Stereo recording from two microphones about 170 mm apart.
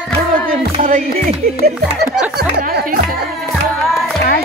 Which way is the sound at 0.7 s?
45° right (ahead or behind).